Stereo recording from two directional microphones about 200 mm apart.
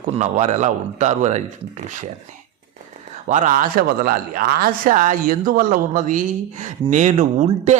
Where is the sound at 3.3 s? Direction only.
40° right (ahead or behind).